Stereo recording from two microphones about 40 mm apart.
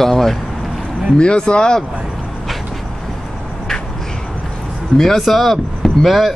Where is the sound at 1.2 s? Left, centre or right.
Left.